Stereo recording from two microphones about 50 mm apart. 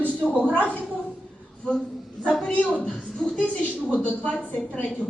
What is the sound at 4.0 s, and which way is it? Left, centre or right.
Speech, left.